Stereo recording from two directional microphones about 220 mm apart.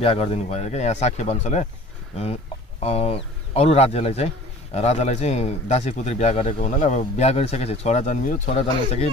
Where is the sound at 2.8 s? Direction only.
25° left (ahead or behind).